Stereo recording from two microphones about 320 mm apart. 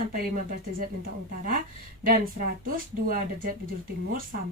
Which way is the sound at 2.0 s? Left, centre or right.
Right.